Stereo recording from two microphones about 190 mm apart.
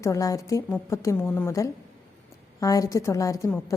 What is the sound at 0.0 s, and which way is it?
A woman's voice, 15° left (ahead or behind).